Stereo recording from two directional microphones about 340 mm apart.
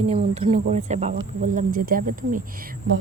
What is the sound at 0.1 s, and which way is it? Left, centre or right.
Speech, centre.